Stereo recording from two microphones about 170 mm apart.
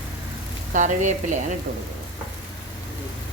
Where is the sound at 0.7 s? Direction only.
45° right (ahead or behind).